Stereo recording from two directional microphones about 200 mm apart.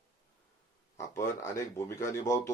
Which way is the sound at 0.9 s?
15° left (ahead or behind).